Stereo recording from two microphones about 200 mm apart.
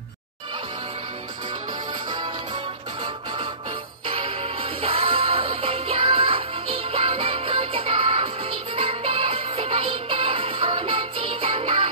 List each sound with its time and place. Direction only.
2.0 s music: 20° right (ahead or behind)